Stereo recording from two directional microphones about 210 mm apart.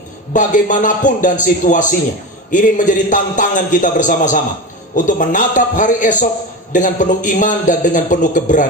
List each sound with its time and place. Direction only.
0.3 s a man's voice: 40° left (ahead or behind)